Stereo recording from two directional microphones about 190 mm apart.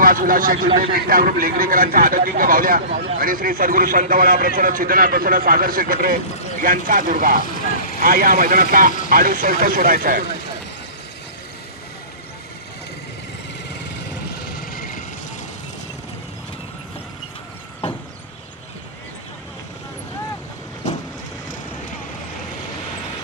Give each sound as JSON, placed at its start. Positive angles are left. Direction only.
{"t": 0.0, "sound": "a man's voice", "side_deg": -45}
{"t": 14.4, "sound": "vehicle", "side_deg": 50}